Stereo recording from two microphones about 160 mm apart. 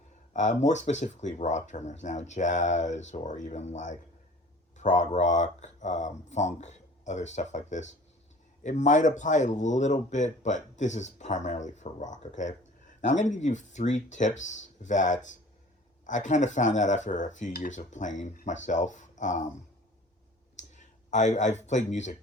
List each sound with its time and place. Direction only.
0.3 s speech: 50° left (ahead or behind)
20.6 s speech: 50° left (ahead or behind)